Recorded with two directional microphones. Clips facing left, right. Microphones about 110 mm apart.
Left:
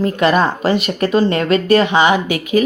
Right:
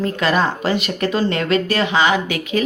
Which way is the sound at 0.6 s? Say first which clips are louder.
Left 4 dB; 30° left (ahead or behind).